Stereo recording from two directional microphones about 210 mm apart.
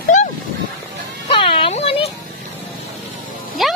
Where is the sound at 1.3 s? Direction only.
25° left (ahead or behind).